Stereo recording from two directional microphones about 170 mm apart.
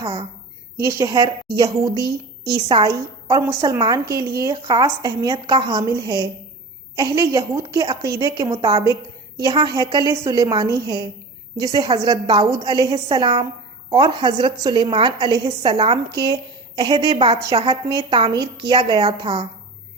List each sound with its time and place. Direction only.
0.0 s a woman's voice: 30° right (ahead or behind)
2.9 s a woman's voice: 20° right (ahead or behind)
8.5 s a woman's voice: 35° right (ahead or behind)
9.4 s a woman's voice: 25° right (ahead or behind)